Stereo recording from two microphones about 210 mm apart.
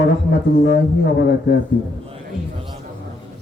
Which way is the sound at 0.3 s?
55° left (ahead or behind).